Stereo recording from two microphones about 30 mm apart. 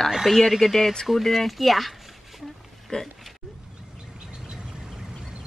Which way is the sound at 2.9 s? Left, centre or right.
Left.